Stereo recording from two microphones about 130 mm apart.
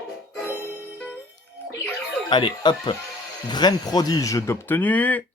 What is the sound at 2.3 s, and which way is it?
Speech, 35° left (ahead or behind).